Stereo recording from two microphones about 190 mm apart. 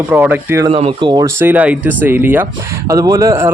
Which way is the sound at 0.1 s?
10° right (ahead or behind).